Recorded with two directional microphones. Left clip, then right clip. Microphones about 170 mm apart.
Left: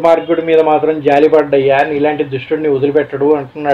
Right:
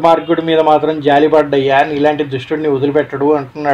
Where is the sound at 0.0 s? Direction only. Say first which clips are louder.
Even; 35° right (ahead or behind).